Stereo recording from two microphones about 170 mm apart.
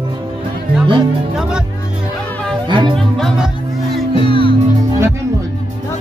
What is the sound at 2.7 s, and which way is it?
Speech, 30° right (ahead or behind).